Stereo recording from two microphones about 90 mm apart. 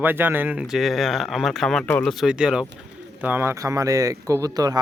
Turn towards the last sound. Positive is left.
turn(degrees=-45)  # may be behind; listen again after turning